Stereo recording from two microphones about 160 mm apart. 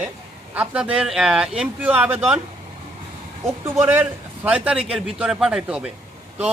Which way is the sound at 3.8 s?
10° right (ahead or behind).